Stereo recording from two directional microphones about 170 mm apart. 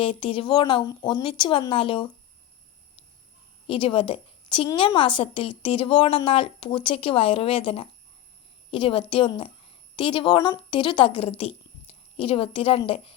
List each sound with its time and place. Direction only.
0.0 s a woman's voice: 30° left (ahead or behind)
3.7 s a woman's voice: 30° left (ahead or behind)